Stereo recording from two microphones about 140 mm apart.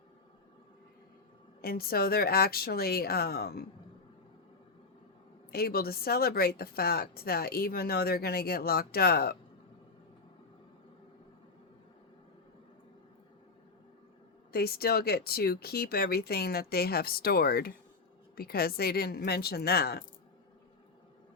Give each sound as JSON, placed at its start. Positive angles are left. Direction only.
{"t": 1.6, "sound": "a woman's voice", "side_deg": 90}
{"t": 5.5, "sound": "a woman's voice", "side_deg": 90}
{"t": 14.5, "sound": "a woman's voice", "side_deg": 90}